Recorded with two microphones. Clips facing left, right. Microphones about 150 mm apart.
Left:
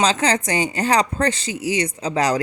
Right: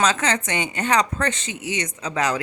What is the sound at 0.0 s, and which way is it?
A woman's voice, 30° left (ahead or behind).